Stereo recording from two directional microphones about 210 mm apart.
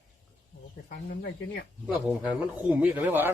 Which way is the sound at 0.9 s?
45° left (ahead or behind).